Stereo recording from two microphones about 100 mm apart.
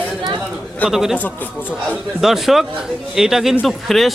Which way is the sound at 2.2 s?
5° right (ahead or behind).